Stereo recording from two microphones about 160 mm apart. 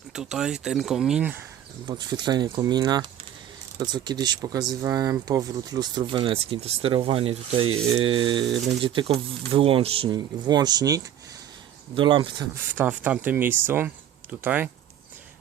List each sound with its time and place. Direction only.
0.1 s speech: 5° right (ahead or behind)
1.9 s speech: 25° right (ahead or behind)
12.7 s speech: 10° right (ahead or behind)